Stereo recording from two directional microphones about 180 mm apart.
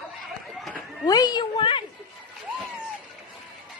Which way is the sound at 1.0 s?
20° left (ahead or behind).